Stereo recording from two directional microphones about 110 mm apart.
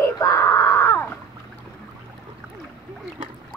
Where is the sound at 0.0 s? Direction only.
30° left (ahead or behind).